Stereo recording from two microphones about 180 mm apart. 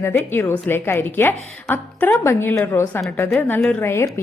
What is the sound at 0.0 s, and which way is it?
A woman's voice, 10° left (ahead or behind).